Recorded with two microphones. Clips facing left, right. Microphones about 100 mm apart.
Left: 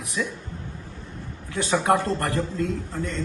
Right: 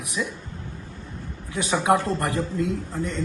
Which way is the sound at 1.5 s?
15° right (ahead or behind).